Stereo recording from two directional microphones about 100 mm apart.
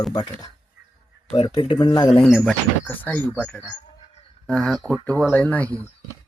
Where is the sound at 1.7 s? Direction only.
70° left (ahead or behind).